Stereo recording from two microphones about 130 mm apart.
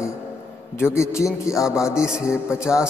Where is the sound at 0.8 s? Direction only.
20° left (ahead or behind).